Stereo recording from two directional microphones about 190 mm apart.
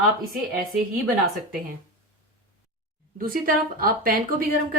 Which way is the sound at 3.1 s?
45° right (ahead or behind).